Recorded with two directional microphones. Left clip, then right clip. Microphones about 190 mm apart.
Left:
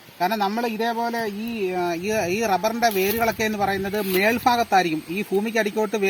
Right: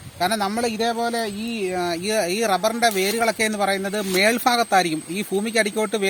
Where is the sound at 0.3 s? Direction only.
35° right (ahead or behind).